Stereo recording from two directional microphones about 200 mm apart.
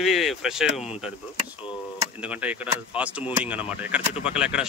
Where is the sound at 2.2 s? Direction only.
10° right (ahead or behind).